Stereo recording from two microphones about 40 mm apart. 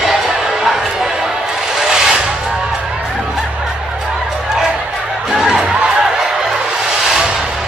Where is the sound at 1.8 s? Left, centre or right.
Centre.